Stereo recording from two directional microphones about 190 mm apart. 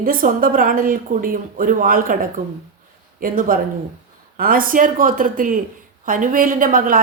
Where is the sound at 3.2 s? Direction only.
45° right (ahead or behind).